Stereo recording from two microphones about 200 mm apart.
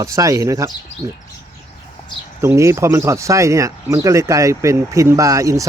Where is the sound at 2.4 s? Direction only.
15° right (ahead or behind).